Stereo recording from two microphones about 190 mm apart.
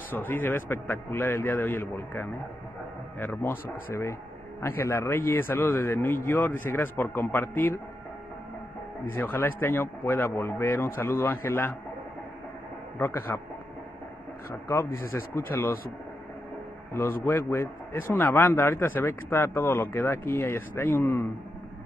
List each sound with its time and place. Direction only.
0.1 s speech: 10° left (ahead or behind)
9.1 s speech: 10° left (ahead or behind)
13.3 s speech: 10° left (ahead or behind)
14.5 s speech: 15° left (ahead or behind)
16.9 s speech: 15° left (ahead or behind)